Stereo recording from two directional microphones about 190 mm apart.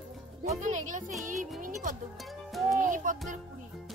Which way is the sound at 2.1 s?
Centre (ahead or behind).